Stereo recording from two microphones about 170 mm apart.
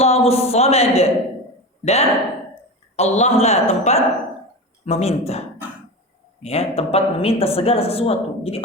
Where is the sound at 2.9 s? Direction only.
40° left (ahead or behind).